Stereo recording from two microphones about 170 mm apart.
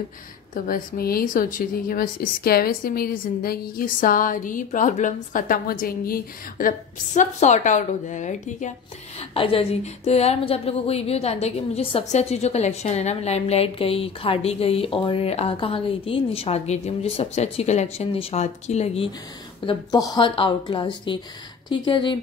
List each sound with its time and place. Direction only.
0.7 s a woman's voice: 60° left (ahead or behind)
7.2 s a woman's voice: 45° left (ahead or behind)
9.2 s speech: 35° left (ahead or behind)
19.6 s a woman's voice: 25° left (ahead or behind)